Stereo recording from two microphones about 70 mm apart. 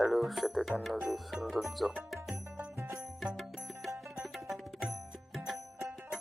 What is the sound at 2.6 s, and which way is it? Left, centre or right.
Music, right.